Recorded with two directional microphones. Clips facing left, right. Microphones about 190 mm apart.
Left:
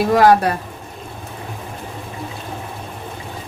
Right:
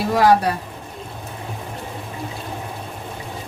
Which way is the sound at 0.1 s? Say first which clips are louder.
Left 2 dB; 50° left (ahead or behind).